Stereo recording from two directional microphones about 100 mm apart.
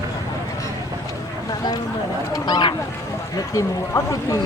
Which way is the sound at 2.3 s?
45° left (ahead or behind).